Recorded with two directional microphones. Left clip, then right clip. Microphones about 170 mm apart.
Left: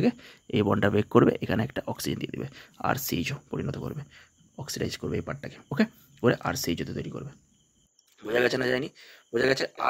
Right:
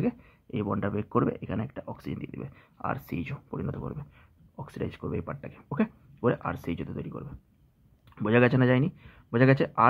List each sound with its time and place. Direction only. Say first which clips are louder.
0.0 s speech: left 4 dB; 45° left (ahead or behind)